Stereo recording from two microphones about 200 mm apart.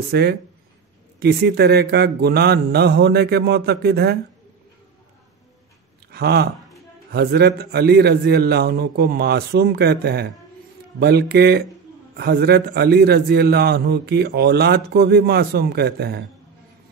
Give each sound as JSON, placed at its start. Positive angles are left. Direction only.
{"t": 0.1, "sound": "a man's voice", "side_deg": -55}
{"t": 6.1, "sound": "a man's voice", "side_deg": -50}